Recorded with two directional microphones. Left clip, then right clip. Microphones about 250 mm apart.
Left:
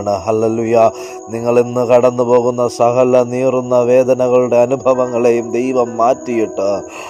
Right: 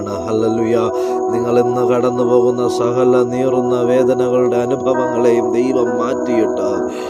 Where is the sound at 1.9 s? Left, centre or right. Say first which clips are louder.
Left 4 dB; right.